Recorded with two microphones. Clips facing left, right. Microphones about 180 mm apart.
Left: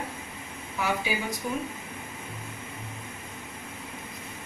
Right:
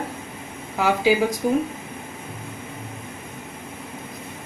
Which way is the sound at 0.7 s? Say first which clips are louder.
Right 10 dB; 90° right.